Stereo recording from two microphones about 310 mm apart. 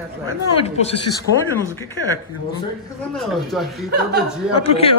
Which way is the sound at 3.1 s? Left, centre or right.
Centre.